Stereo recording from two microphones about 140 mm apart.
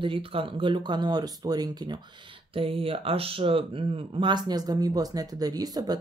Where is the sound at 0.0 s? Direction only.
40° right (ahead or behind).